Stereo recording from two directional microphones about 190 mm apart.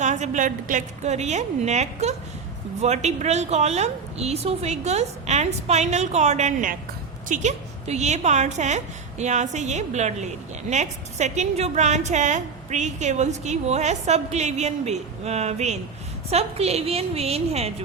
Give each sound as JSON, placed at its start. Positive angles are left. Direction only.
{"t": 0.0, "sound": "a woman's voice", "side_deg": -40}